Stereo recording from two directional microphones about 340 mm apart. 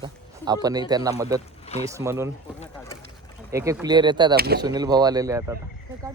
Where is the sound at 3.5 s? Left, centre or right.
Centre.